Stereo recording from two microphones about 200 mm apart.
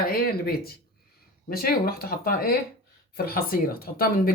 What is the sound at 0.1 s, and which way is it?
Speech, 50° left (ahead or behind).